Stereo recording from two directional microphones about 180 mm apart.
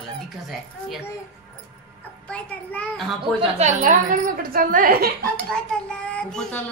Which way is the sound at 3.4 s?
40° right (ahead or behind).